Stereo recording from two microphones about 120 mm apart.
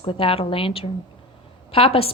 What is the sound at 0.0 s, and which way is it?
A woman's voice, 45° left (ahead or behind).